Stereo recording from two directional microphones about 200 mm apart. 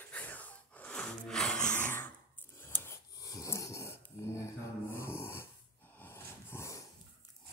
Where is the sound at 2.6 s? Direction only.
10° left (ahead or behind).